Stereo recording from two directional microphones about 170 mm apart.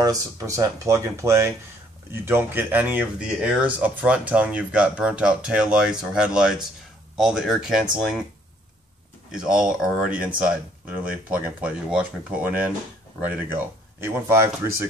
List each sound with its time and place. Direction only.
0.0 s speech: 20° right (ahead or behind); by 7.9 s 5° right (ahead or behind)
9.3 s speech: 5° right (ahead or behind)